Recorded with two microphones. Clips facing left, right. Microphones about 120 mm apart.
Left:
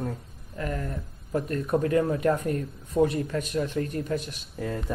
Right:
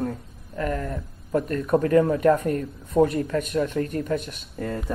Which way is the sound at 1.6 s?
55° right (ahead or behind).